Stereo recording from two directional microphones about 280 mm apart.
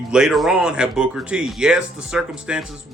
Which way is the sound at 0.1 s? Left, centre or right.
Centre.